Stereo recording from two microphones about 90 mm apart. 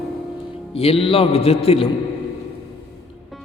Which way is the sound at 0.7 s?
90° left.